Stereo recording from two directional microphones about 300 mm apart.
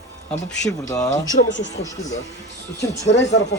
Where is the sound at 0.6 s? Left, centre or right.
Centre.